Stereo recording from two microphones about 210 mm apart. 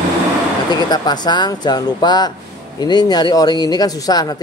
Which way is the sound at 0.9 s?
20° left (ahead or behind).